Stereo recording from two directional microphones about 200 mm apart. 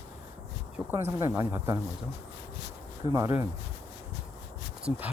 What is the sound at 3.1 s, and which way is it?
Speech, 15° right (ahead or behind).